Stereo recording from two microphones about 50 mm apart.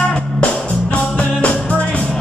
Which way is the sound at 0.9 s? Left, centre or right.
Left.